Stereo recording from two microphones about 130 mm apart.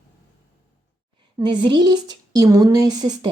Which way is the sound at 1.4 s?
35° right (ahead or behind).